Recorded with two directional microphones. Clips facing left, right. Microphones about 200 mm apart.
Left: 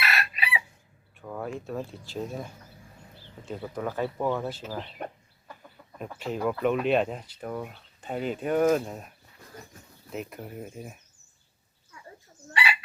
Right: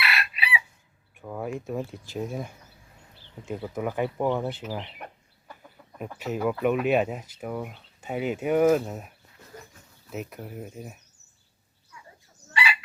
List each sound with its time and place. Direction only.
0.0 s chicken: 45° left (ahead or behind)
1.2 s speech: 10° right (ahead or behind)
6.2 s speech: 5° right (ahead or behind)